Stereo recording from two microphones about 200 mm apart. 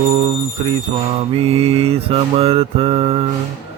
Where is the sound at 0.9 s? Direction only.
25° right (ahead or behind).